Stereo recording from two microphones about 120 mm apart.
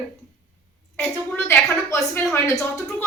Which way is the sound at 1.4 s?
25° left (ahead or behind).